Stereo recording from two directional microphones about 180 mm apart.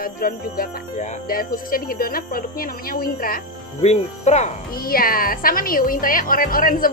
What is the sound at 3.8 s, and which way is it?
Speech, 40° left (ahead or behind).